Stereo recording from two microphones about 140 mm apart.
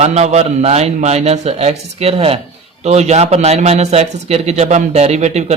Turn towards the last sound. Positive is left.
turn(degrees=-50)  # may be behind; listen again after turning